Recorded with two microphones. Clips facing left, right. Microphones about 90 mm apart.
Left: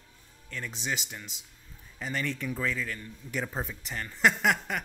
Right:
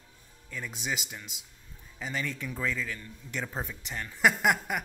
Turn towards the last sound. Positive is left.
turn(degrees=-5)  # may be behind; listen again after turning